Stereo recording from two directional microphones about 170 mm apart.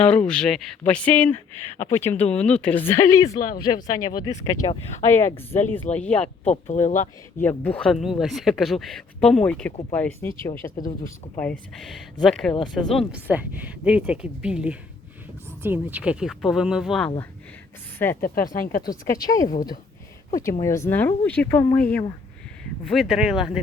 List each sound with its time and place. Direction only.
0.0 s speech: 5° left (ahead or behind); by 4.8 s 25° left (ahead or behind)
5.1 s speech: 15° left (ahead or behind)
6.4 s speech: 40° left (ahead or behind)
7.3 s speech: 10° left (ahead or behind)
11.8 s speech: centre (ahead or behind)
13.2 s speech: 10° right (ahead or behind)
18.2 s speech: 55° left (ahead or behind)
18.8 s speech: 20° left (ahead or behind); by 23.5 s centre (ahead or behind)